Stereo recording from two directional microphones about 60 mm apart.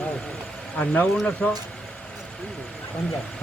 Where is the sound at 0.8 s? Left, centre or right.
Centre.